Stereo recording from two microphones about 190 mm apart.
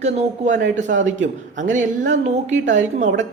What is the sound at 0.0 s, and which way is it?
Speech, 40° right (ahead or behind).